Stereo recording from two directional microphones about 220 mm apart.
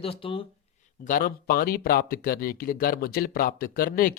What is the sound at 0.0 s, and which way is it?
Speech, 25° left (ahead or behind).